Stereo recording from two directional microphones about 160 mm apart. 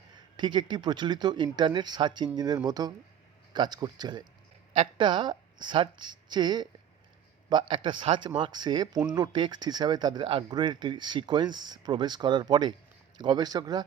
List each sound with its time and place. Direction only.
0.3 s speech: 30° right (ahead or behind)